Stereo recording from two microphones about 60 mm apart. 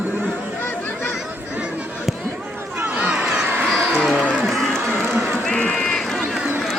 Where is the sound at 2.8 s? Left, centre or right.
Right.